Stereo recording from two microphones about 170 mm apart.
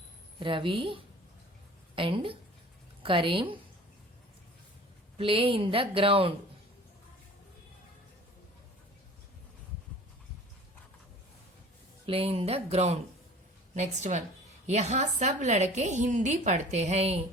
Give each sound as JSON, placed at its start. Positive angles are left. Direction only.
{"t": 0.3, "sound": "speech", "side_deg": -30}
{"t": 5.1, "sound": "speech", "side_deg": -35}
{"t": 12.0, "sound": "a woman's voice", "side_deg": -35}